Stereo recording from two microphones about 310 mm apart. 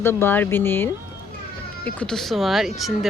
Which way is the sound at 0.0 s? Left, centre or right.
Centre.